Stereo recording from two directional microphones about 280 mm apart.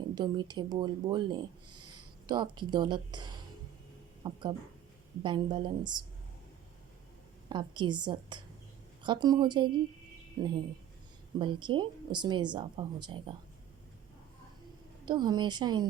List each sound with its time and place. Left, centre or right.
0.1 s speech: centre
1.7 s a sound: right
2.2 s speech: centre
7.5 s speech: centre
15.0 s speech: centre